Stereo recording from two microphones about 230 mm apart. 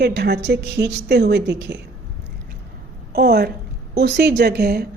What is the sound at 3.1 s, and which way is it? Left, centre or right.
A woman's voice, right.